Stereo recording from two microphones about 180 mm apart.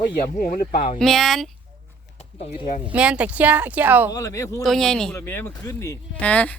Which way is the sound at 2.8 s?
5° right (ahead or behind).